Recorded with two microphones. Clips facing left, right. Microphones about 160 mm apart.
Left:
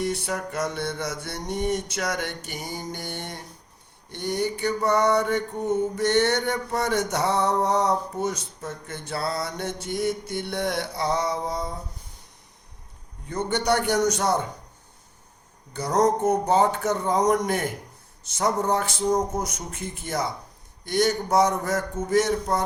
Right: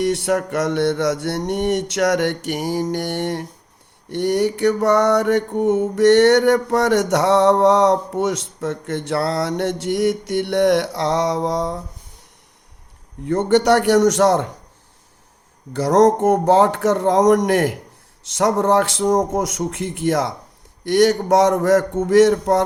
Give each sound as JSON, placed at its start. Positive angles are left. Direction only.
{"t": 0.0, "sound": "mantra", "side_deg": -80}
{"t": 13.5, "sound": "speech", "side_deg": -90}
{"t": 15.7, "sound": "speech", "side_deg": -90}